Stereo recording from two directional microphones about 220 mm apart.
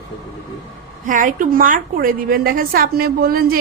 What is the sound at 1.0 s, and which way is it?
A woman's voice, 35° right (ahead or behind).